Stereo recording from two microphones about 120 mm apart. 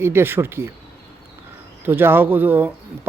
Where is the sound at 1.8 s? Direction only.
15° right (ahead or behind).